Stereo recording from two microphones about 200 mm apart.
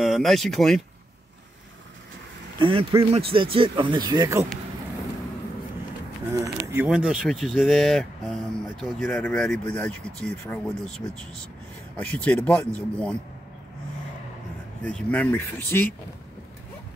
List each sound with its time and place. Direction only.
0.0 s speech: centre (ahead or behind)
2.6 s speech: 25° right (ahead or behind)
6.3 s speech: 15° right (ahead or behind); by 10.6 s 5° left (ahead or behind)
12.0 s speech: 5° left (ahead or behind)
14.8 s speech: 5° left (ahead or behind)